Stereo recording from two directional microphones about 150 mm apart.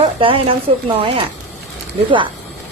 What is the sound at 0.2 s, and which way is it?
Speech, 35° right (ahead or behind).